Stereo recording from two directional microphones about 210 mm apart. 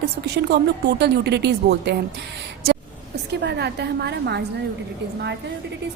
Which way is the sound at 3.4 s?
50° right (ahead or behind).